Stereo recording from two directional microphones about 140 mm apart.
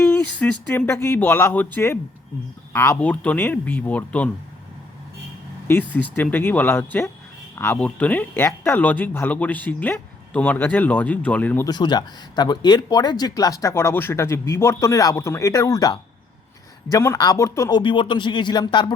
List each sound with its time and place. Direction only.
0.0 s a sound: 10° left (ahead or behind)
0.9 s speech: 15° left (ahead or behind)
5.6 s speech: 15° left (ahead or behind)
11.6 s speech: 30° left (ahead or behind)
17.7 s speech: 35° left (ahead or behind)